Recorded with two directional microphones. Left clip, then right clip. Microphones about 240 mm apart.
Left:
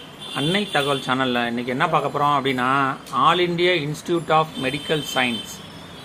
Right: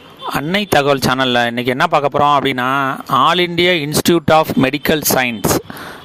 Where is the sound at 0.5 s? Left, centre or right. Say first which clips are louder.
Right 9 dB; right.